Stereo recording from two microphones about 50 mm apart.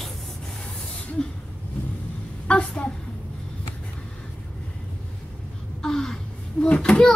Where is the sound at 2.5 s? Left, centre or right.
Left.